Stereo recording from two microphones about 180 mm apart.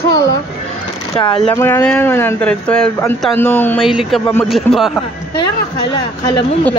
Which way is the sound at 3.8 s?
Centre (ahead or behind).